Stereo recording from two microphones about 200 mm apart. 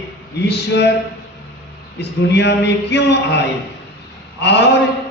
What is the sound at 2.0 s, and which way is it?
A man's voice, 60° left (ahead or behind).